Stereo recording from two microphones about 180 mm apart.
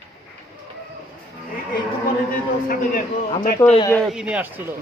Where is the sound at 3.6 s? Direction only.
15° left (ahead or behind).